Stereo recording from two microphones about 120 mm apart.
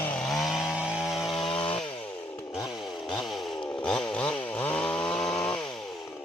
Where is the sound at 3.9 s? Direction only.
5° left (ahead or behind).